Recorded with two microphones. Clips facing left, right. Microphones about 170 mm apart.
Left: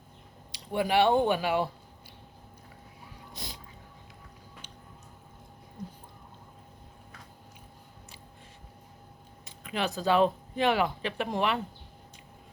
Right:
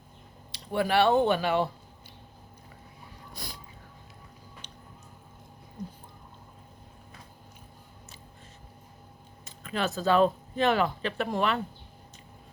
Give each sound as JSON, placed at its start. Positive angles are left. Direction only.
{"t": 0.5, "sound": "speech", "side_deg": 15}
{"t": 3.3, "sound": "a sound", "side_deg": 20}
{"t": 9.4, "sound": "speech", "side_deg": 15}